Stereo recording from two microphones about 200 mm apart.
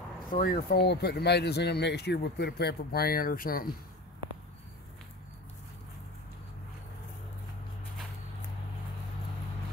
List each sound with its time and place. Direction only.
0.3 s speech: 45° left (ahead or behind)